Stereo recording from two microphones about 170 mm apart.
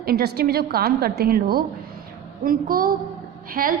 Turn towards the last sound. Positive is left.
turn(degrees=-55)  # may be behind; listen again after turning